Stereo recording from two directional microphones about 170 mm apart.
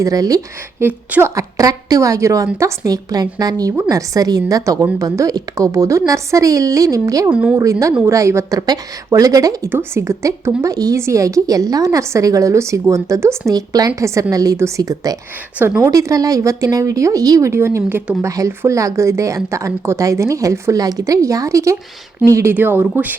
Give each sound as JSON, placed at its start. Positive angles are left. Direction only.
{"t": 0.0, "sound": "a woman's voice", "side_deg": -20}
{"t": 7.3, "sound": "speech", "side_deg": -5}
{"t": 7.6, "sound": "a woman's voice", "side_deg": -20}